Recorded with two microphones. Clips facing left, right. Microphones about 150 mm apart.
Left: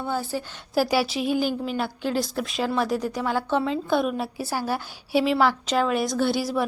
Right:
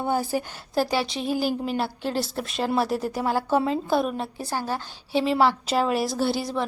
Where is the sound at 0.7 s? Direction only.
10° left (ahead or behind).